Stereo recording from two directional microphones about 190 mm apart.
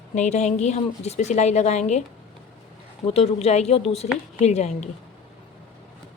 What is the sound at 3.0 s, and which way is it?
A woman's voice, 35° left (ahead or behind).